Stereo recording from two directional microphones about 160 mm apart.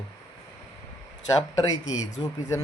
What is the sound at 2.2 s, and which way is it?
Speech, 30° left (ahead or behind).